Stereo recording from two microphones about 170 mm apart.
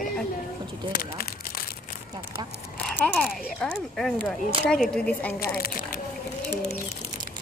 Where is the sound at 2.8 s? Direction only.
5° left (ahead or behind).